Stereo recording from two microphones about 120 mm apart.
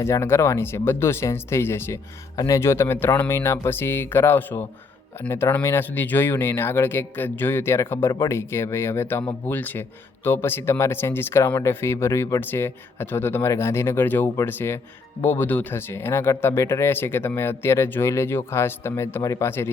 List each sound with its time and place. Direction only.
0.0 s speech: 20° left (ahead or behind)